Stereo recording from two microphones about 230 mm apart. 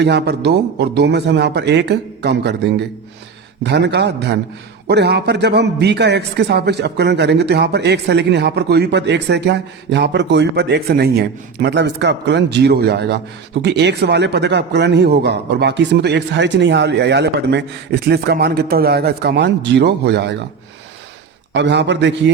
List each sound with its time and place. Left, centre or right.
0.0 s a man's voice: right
3.6 s a man's voice: right
21.5 s a man's voice: right